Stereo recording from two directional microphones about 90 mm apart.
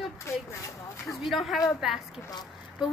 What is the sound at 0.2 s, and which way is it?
Speech, 35° left (ahead or behind).